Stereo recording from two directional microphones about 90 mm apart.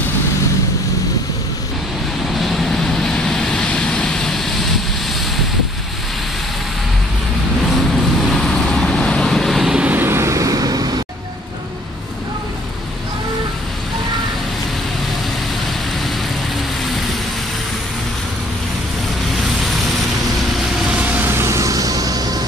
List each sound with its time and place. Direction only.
2.4 s vehicle: centre (ahead or behind)
8.3 s vehicle: 5° left (ahead or behind)
9.8 s vehicle: 25° right (ahead or behind); by 10.9 s 45° right (ahead or behind)
21.0 s vehicle: 20° right (ahead or behind); by 22.4 s 45° right (ahead or behind)